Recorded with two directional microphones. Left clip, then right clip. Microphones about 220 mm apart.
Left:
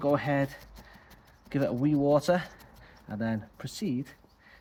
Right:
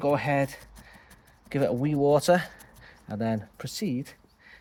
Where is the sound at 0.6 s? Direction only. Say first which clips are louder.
Right 1 dB; 15° right (ahead or behind).